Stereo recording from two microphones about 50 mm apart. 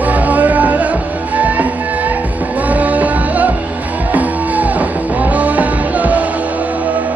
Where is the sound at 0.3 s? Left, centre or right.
Right.